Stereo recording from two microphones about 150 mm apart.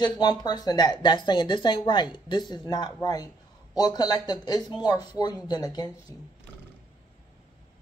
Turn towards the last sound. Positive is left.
turn(degrees=25)  # may be behind; listen again after turning